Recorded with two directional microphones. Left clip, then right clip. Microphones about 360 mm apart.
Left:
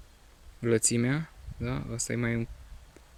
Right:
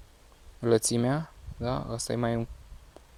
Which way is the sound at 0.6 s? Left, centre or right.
Centre.